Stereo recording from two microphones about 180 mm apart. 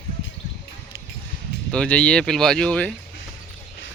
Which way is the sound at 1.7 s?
5° left (ahead or behind).